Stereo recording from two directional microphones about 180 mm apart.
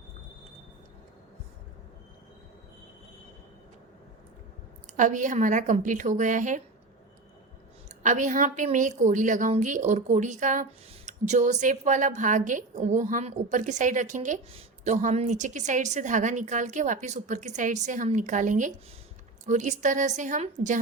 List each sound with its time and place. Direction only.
4.9 s a woman's voice: 45° right (ahead or behind)
8.0 s a woman's voice: 45° right (ahead or behind)